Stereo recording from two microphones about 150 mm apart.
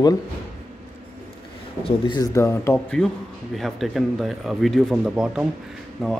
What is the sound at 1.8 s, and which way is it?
Speech, 30° left (ahead or behind).